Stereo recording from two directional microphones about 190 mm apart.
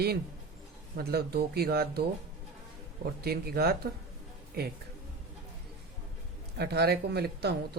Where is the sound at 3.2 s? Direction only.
55° right (ahead or behind).